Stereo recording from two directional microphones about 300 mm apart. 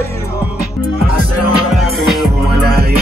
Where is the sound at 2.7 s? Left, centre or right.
Right.